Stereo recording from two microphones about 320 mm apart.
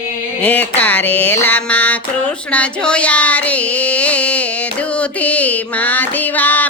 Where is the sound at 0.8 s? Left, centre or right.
Centre.